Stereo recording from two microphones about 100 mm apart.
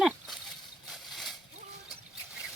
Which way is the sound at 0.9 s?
Centre (ahead or behind).